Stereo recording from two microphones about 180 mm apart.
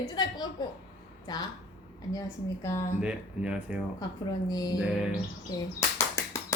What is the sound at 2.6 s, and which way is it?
Speech, 15° left (ahead or behind).